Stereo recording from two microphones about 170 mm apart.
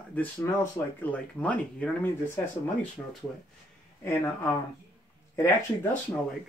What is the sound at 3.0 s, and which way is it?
Speech, 20° left (ahead or behind).